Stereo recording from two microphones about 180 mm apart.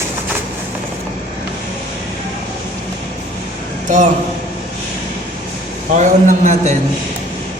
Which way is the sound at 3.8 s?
45° right (ahead or behind).